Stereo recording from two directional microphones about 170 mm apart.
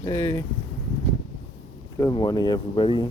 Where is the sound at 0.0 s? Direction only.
20° left (ahead or behind).